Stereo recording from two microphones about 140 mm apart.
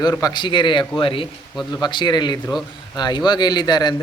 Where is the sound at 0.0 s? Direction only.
25° left (ahead or behind).